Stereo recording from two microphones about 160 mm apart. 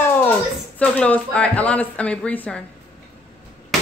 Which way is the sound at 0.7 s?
10° left (ahead or behind).